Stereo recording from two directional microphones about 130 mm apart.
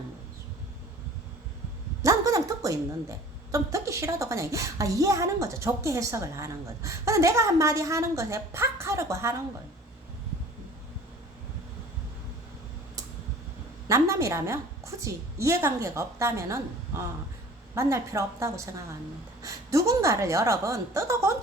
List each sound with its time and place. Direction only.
2.0 s a woman's voice: 25° right (ahead or behind)
13.8 s a woman's voice: 25° right (ahead or behind)